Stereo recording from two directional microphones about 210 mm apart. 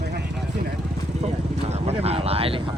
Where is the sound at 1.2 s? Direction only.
30° right (ahead or behind).